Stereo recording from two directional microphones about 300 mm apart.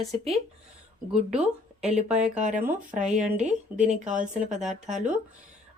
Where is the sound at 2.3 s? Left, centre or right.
Right.